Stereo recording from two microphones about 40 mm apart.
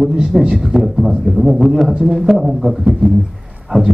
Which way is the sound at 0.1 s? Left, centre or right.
Centre.